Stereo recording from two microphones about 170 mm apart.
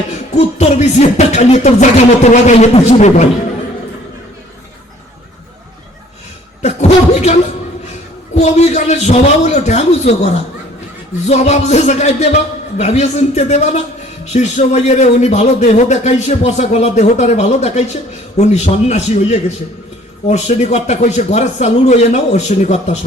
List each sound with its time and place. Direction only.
0.1 s music: 40° left (ahead or behind)
6.6 s a sound: 40° left (ahead or behind)
8.4 s a man's voice: 40° left (ahead or behind)
11.3 s a man's voice: 40° left (ahead or behind)